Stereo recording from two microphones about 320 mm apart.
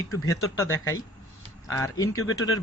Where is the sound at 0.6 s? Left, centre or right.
Left.